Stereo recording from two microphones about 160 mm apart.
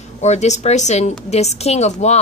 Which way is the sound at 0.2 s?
45° left (ahead or behind).